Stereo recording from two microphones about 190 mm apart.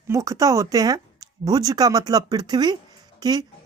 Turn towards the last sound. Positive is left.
turn(degrees=-20)  # may be behind; listen again after turning